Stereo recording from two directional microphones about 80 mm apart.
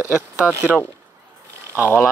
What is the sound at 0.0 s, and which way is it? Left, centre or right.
Speech, centre.